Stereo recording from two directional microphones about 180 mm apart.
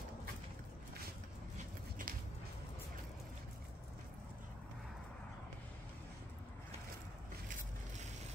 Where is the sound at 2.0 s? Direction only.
50° right (ahead or behind).